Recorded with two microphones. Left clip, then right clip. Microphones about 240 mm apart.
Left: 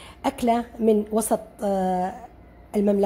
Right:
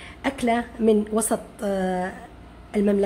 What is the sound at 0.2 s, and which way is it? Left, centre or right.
A woman's voice, centre.